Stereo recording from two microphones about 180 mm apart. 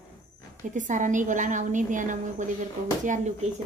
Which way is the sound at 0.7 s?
45° right (ahead or behind).